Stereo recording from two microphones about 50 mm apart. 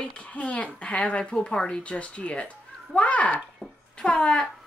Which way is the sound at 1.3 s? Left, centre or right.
Centre.